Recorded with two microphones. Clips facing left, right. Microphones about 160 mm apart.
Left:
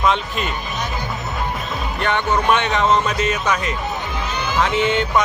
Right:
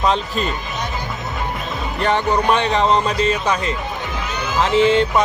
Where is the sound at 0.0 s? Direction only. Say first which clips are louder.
Right 1 dB; 35° right (ahead or behind).